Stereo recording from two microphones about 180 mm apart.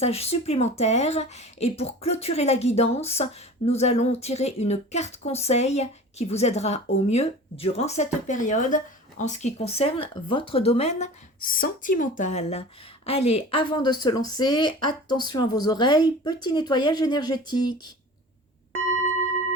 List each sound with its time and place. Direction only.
0.0 s speech: 35° left (ahead or behind)